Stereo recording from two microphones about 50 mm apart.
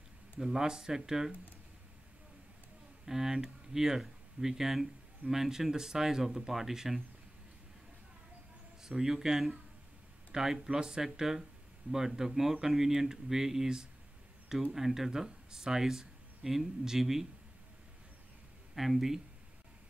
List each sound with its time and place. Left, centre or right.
0.4 s speech: centre
3.1 s speech: centre
8.8 s speech: centre
11.9 s speech: right
12.2 s speech: centre
18.8 s speech: centre